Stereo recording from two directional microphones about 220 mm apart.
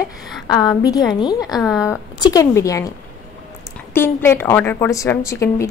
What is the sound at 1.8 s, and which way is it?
A woman's voice, 15° left (ahead or behind).